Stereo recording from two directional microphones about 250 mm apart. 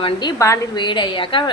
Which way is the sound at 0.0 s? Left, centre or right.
Centre.